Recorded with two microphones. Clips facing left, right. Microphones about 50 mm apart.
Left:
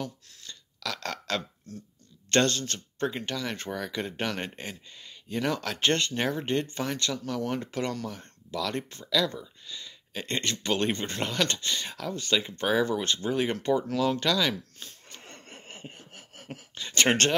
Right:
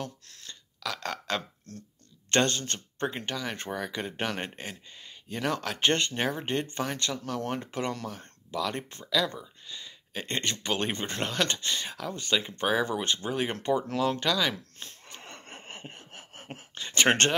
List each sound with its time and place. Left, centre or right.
0.8 s burping: centre
2.3 s speech: right
7.2 s speech: right
8.5 s speech: centre
12.1 s speech: right
14.2 s speech: centre
14.8 s a sound: right